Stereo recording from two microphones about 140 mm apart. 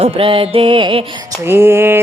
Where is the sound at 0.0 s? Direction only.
40° right (ahead or behind).